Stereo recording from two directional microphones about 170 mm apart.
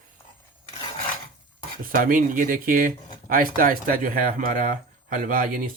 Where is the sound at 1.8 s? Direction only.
55° right (ahead or behind).